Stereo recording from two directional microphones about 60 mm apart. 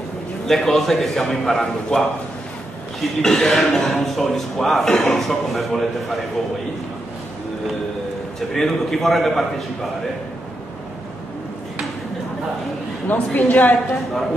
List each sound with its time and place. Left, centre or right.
0.5 s a man's voice: centre
8.4 s a man's voice: centre
13.0 s a woman's voice: left